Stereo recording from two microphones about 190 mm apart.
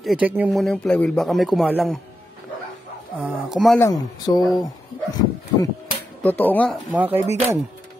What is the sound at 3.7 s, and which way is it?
Speech, 20° left (ahead or behind).